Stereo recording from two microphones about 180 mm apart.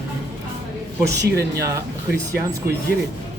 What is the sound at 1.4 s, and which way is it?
Speech, 20° right (ahead or behind).